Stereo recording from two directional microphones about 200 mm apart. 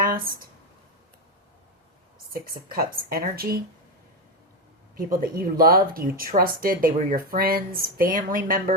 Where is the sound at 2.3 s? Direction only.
45° right (ahead or behind).